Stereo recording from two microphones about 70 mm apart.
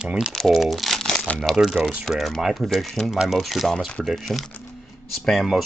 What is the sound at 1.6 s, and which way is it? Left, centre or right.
Speech, centre.